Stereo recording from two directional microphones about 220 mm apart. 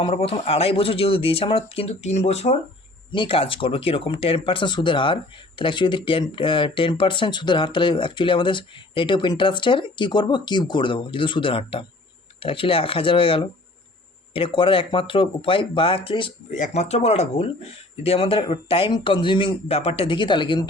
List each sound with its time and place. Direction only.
0.0 s speech: 25° left (ahead or behind)